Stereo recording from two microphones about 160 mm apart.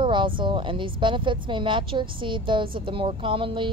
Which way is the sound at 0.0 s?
30° right (ahead or behind).